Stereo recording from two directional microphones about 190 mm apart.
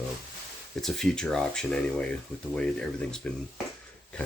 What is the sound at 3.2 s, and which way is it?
Speech, 5° left (ahead or behind).